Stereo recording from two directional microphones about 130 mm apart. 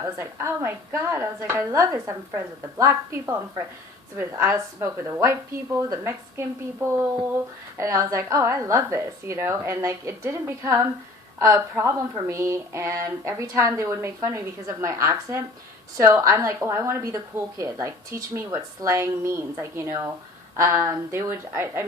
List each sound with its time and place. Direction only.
0.2 s speech: 20° right (ahead or behind)